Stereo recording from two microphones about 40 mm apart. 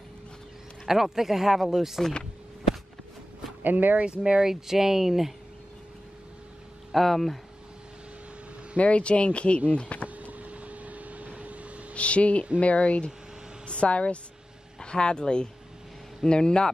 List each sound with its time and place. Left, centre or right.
0.8 s speech: centre
3.6 s speech: right
4.0 s speech: right; by 5.3 s centre
6.9 s speech: centre
8.7 s speech: left
10.0 s vehicle: right
11.9 s speech: left